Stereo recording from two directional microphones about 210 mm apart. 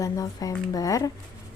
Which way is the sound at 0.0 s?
15° left (ahead or behind).